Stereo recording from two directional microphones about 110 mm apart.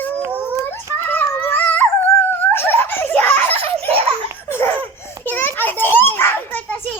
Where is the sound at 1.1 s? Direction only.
15° left (ahead or behind).